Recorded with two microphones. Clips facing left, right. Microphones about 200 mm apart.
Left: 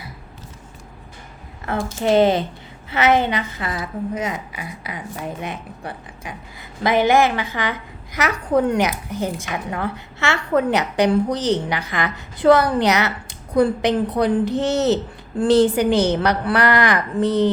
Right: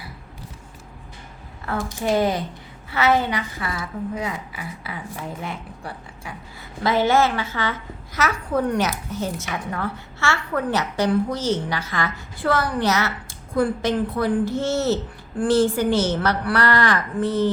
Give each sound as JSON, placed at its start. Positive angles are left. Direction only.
{"t": 1.6, "sound": "a woman's voice", "side_deg": 20}